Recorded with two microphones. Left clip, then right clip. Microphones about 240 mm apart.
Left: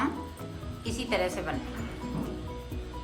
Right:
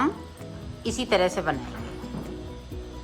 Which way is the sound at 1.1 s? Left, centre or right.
Right.